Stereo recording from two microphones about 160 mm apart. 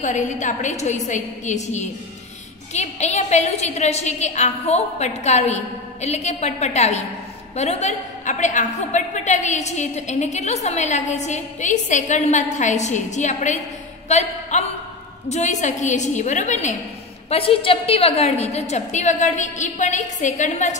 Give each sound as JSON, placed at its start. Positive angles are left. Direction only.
{"t": 0.0, "sound": "a woman's voice", "side_deg": 50}
{"t": 17.3, "sound": "a woman's voice", "side_deg": 35}